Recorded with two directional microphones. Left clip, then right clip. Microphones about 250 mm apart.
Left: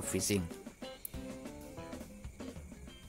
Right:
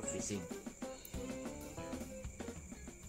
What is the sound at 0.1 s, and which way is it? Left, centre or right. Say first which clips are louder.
Speech: left 7 dB; left.